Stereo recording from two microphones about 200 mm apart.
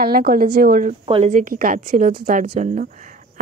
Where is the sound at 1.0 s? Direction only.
30° right (ahead or behind).